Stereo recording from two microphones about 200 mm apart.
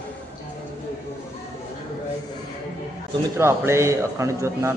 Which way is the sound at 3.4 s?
15° right (ahead or behind).